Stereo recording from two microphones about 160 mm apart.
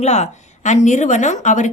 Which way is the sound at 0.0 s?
45° left (ahead or behind).